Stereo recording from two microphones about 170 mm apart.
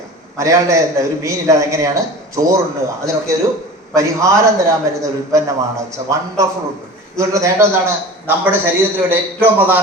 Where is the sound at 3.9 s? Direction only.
20° right (ahead or behind).